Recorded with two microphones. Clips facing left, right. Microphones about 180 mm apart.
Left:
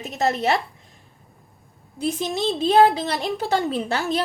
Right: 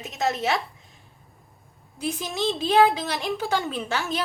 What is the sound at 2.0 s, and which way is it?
A woman's voice, 35° left (ahead or behind).